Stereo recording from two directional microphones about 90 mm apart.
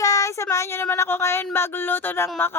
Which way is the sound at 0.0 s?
40° left (ahead or behind).